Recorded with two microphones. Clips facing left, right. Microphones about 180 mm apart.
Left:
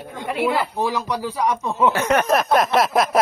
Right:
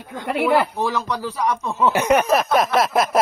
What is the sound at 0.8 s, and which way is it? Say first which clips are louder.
Speech: even; 10° left (ahead or behind).